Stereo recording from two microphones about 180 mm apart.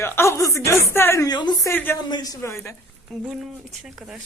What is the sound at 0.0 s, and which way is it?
A woman's voice, 15° left (ahead or behind).